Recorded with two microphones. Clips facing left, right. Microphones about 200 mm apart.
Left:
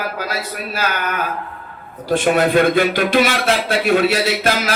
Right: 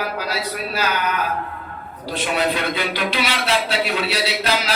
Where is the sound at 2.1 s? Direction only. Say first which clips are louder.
Left 8 dB; 50° left (ahead or behind).